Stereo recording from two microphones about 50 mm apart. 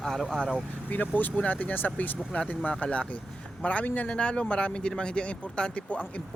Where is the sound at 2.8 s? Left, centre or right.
Left.